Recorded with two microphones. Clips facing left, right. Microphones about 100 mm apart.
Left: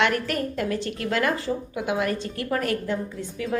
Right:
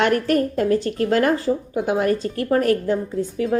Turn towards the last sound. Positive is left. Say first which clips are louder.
# right 8 dB
turn(degrees=-40)  # may be behind; listen again after turning